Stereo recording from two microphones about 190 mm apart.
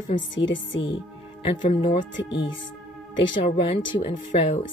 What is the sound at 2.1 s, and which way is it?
Speech, 70° left (ahead or behind).